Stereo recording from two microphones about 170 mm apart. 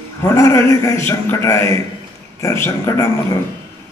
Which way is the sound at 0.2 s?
15° left (ahead or behind).